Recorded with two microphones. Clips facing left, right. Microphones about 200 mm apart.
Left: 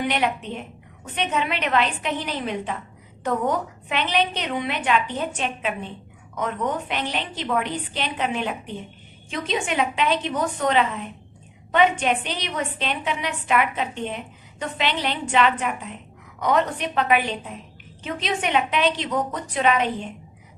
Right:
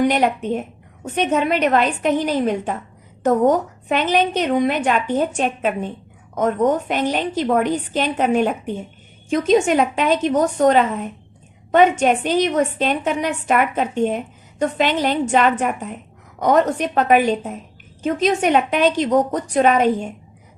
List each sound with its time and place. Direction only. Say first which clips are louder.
0.0 s a woman's voice: right 7 dB; 45° right (ahead or behind)